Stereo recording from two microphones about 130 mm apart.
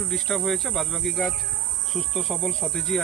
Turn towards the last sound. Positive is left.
turn(degrees=0)  # may be behind; listen again after turning